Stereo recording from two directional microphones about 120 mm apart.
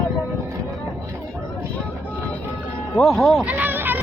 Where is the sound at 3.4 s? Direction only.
15° right (ahead or behind).